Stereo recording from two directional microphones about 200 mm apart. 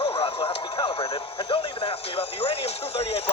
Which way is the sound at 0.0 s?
30° left (ahead or behind).